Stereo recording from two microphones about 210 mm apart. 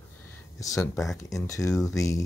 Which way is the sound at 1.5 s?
15° left (ahead or behind).